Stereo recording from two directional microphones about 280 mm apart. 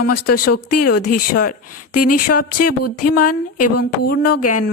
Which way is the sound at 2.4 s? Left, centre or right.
Left.